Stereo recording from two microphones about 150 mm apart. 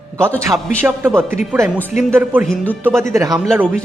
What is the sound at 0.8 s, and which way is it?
Speech, 15° right (ahead or behind).